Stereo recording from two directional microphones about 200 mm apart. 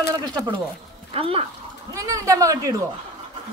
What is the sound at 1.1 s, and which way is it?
Speech, 30° right (ahead or behind).